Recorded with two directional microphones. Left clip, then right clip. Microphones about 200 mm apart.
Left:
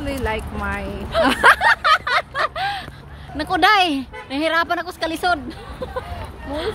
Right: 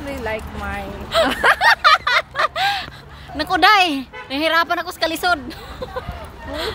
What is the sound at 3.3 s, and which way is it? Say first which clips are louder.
A woman's voice: right 2 dB; 10° right (ahead or behind).